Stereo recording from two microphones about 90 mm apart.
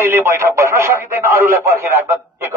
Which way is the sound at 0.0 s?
30° right (ahead or behind).